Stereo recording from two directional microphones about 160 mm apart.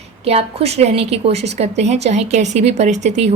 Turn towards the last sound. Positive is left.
turn(degrees=-45)  # may be behind; listen again after turning